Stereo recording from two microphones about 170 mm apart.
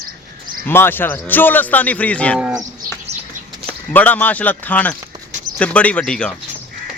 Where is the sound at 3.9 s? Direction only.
10° left (ahead or behind).